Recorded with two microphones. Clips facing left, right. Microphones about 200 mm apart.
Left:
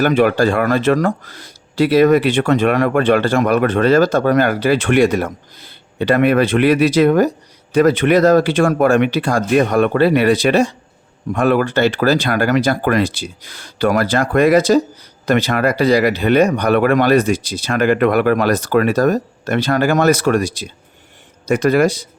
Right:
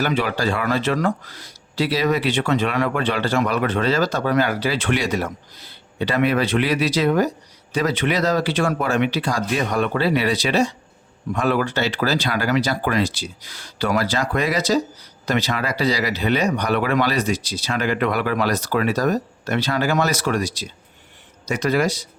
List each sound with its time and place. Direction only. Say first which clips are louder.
0.0 s speech: left 8 dB; 50° left (ahead or behind)